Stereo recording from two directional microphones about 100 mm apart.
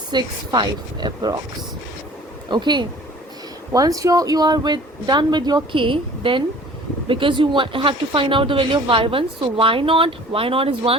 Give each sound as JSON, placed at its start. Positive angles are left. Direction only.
{"t": 0.1, "sound": "speech", "side_deg": -45}
{"t": 2.5, "sound": "speech", "side_deg": -50}
{"t": 3.7, "sound": "speech", "side_deg": -35}